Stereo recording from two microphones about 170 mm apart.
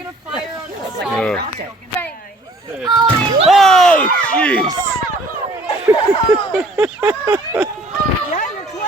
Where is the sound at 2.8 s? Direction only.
30° right (ahead or behind).